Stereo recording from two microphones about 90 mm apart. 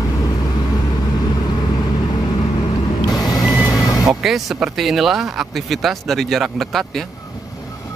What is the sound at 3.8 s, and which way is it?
Vehicle, 40° left (ahead or behind).